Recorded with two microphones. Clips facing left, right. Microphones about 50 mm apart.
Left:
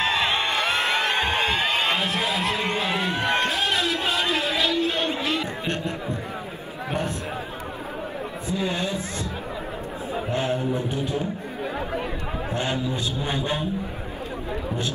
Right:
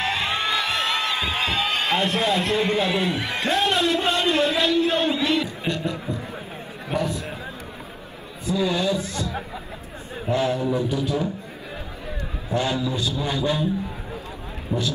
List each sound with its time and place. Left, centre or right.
0.0 s music: left
2.0 s a man's voice: centre
2.9 s speech: left
3.5 s a man's voice: centre
5.4 s a man's voice: left
8.5 s a man's voice: left
10.3 s a man's voice: left
12.5 s a man's voice: left